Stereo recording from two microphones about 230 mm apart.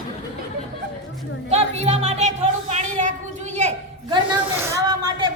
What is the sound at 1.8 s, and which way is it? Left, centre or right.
Speech, right.